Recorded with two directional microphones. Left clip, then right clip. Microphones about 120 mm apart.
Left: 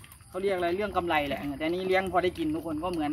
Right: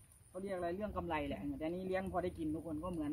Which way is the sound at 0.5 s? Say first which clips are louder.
Left 13 dB; 25° right (ahead or behind).